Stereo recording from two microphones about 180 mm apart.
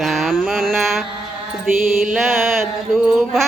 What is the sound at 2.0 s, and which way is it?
Mantra, 5° right (ahead or behind).